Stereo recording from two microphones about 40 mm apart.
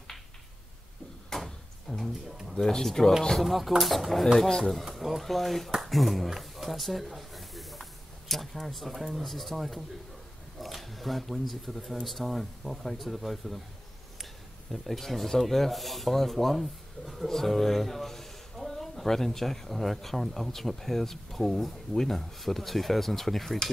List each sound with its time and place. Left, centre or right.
1.3 s drawer open or close: centre
2.5 s speech: centre
14.7 s speech: centre